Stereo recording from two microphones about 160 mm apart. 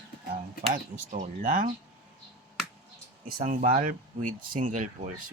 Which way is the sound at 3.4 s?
50° right (ahead or behind).